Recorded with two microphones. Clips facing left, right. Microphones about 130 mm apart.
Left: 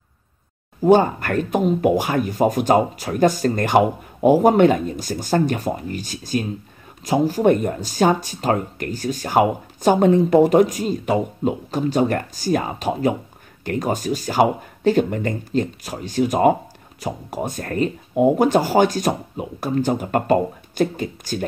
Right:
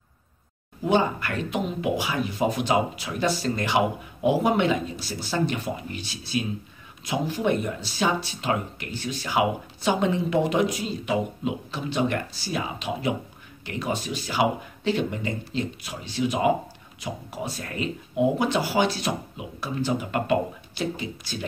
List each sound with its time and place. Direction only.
0.8 s speech: 45° left (ahead or behind)